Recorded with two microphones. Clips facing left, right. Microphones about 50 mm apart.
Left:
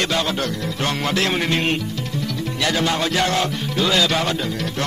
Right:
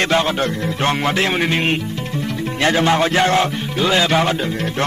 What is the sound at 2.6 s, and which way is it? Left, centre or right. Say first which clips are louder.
Music: right 6 dB; right.